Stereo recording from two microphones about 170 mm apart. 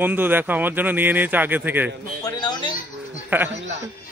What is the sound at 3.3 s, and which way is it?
Speech, 10° right (ahead or behind).